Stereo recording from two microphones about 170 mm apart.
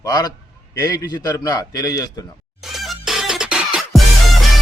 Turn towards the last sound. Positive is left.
turn(degrees=0)  # may be behind; listen again after turning